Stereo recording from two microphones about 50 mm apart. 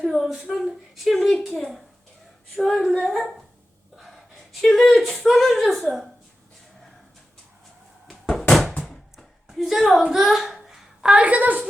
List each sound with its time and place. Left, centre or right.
0.0 s a woman's voice: centre
3.9 s gasp: centre
4.6 s a woman's voice: centre
8.3 s a sound: centre
10.1 s a child's voice: centre
11.0 s a woman's voice: right